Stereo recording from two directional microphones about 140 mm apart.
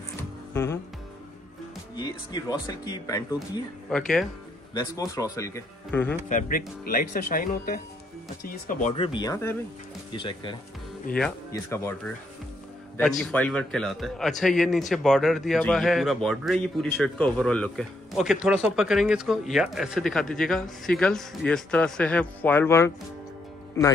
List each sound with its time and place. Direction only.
0.5 s music: 20° left (ahead or behind)
2.0 s speech: 30° left (ahead or behind)
4.7 s speech: 25° left (ahead or behind)
6.2 s speech: 80° left
8.5 s speech: 70° left (ahead or behind)
8.9 s speech: 35° left (ahead or behind)
11.5 s speech: 20° left (ahead or behind)
13.2 s a man's voice: 5° left (ahead or behind)